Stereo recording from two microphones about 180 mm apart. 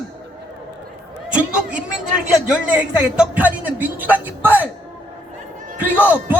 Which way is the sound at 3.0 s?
5° right (ahead or behind).